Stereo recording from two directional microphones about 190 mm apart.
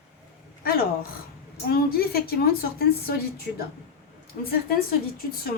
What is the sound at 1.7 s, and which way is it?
Speech, 55° left (ahead or behind).